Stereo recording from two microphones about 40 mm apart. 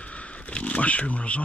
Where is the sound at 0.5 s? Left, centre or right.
Left.